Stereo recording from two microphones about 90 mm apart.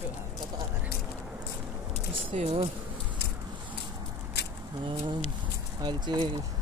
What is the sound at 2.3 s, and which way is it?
Speech, 90° right.